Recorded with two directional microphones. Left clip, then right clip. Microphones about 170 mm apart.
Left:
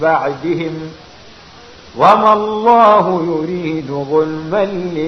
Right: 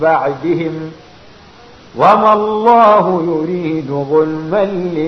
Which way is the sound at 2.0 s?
30° right (ahead or behind).